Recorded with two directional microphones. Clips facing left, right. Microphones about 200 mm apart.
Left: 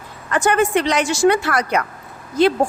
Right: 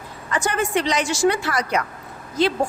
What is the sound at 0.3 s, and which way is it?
A woman's voice, 60° left (ahead or behind).